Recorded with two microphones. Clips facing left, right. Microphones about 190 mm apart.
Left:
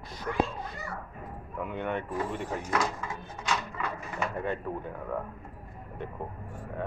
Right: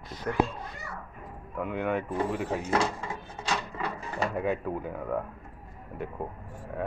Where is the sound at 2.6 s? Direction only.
30° right (ahead or behind).